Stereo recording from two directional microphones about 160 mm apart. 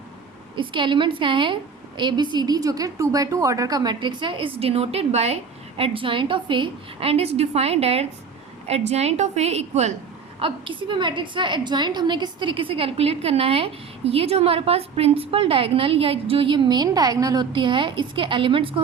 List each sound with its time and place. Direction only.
0.5 s a woman's voice: 30° right (ahead or behind)
10.4 s a woman's voice: 30° right (ahead or behind)